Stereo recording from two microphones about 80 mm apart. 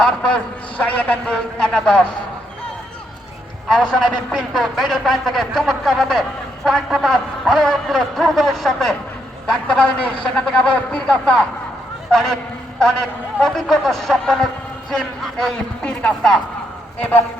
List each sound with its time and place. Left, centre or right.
0.0 s a man's voice: centre
3.7 s a man's voice: centre